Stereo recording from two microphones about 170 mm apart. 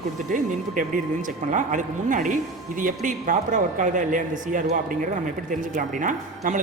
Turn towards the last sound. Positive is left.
turn(degrees=-50)  # may be behind; listen again after turning